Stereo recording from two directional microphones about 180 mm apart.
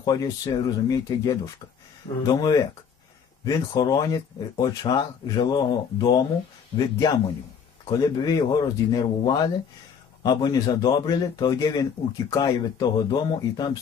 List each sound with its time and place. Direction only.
0.0 s a man's voice: 20° left (ahead or behind)
7.8 s a man's voice: 20° left (ahead or behind)